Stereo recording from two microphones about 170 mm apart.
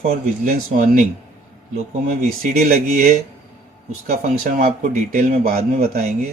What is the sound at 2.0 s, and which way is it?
A man's voice, 55° right (ahead or behind).